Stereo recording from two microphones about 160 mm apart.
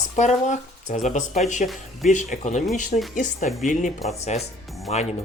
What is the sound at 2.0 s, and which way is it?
Speech, 50° left (ahead or behind).